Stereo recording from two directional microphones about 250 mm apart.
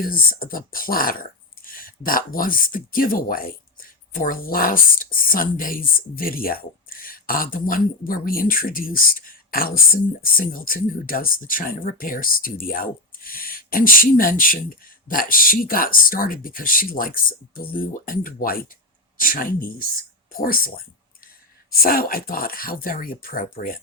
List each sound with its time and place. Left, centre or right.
0.0 s speech: left